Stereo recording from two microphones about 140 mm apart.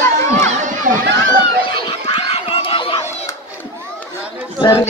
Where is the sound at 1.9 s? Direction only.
45° left (ahead or behind).